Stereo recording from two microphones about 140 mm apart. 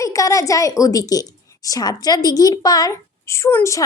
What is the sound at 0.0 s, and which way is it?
A woman's voice, 25° left (ahead or behind).